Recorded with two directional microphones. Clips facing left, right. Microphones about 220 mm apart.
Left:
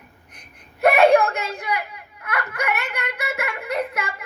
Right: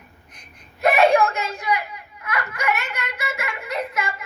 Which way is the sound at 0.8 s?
55° left (ahead or behind).